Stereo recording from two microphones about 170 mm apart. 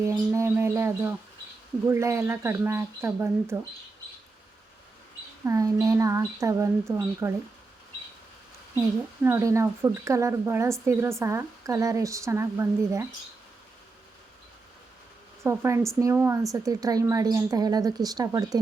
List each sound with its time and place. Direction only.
0.0 s a woman's voice: 15° right (ahead or behind)
5.5 s a woman's voice: 20° right (ahead or behind)
9.2 s a woman's voice: 15° right (ahead or behind)
15.4 s a woman's voice: 15° right (ahead or behind)